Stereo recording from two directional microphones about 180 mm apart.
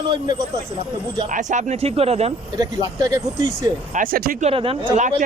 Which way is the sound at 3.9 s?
55° right (ahead or behind).